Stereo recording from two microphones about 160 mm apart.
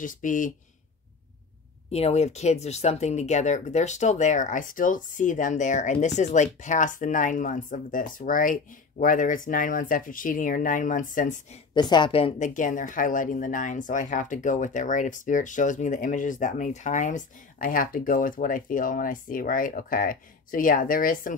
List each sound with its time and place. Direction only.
0.0 s a woman's voice: 55° left (ahead or behind)
1.9 s speech: 40° left (ahead or behind)
11.7 s a woman's voice: 30° left (ahead or behind); by 21.4 s 60° left (ahead or behind)